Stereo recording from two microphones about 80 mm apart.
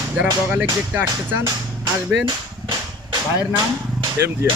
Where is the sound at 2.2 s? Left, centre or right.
Right.